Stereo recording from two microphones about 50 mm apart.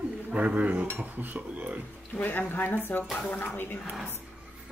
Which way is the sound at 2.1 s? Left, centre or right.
Left.